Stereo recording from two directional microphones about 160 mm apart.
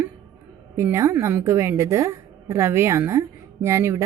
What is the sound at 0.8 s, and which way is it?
A woman's voice, 20° right (ahead or behind).